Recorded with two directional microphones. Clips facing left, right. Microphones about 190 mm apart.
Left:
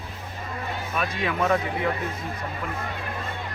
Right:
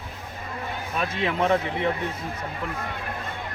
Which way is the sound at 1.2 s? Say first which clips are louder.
Right 1 dB; 25° right (ahead or behind).